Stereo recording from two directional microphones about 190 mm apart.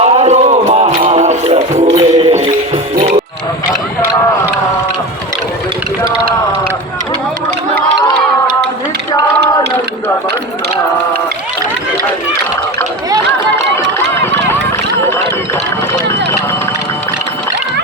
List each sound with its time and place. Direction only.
0.0 s music: 35° right (ahead or behind)